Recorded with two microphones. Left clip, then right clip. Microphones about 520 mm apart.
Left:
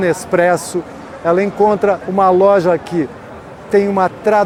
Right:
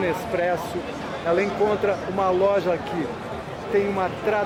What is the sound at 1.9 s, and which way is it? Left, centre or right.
Speech, left.